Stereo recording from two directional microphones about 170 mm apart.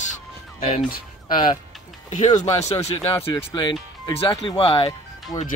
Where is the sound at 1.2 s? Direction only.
30° left (ahead or behind).